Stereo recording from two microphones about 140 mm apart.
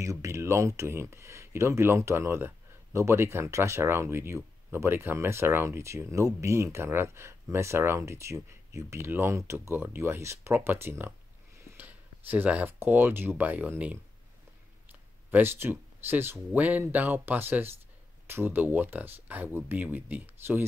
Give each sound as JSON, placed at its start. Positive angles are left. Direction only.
{"t": 0.0, "sound": "speech", "side_deg": -20}